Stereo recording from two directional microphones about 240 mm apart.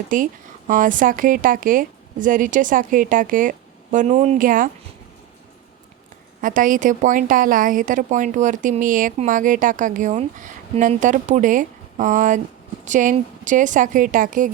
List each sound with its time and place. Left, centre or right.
0.1 s a woman's voice: right
6.4 s a woman's voice: right